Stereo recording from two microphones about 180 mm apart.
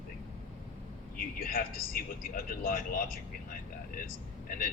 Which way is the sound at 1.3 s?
55° left (ahead or behind).